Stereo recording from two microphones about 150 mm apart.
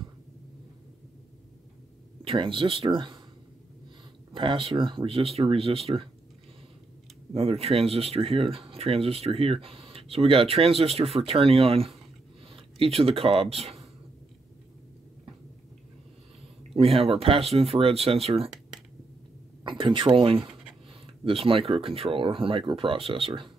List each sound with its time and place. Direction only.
2.2 s speech: 35° right (ahead or behind)
4.3 s speech: 35° right (ahead or behind)
7.3 s speech: 40° right (ahead or behind)
12.4 s a sound: 40° right (ahead or behind)
12.9 s speech: 40° right (ahead or behind)
16.7 s speech: 40° right (ahead or behind)
19.6 s speech: 35° right (ahead or behind)